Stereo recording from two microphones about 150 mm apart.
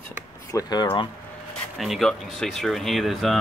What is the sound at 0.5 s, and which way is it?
Speech, 30° left (ahead or behind).